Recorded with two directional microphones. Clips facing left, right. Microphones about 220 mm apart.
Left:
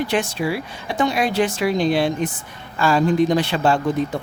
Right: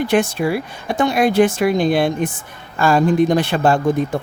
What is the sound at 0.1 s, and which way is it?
Speech, 50° right (ahead or behind).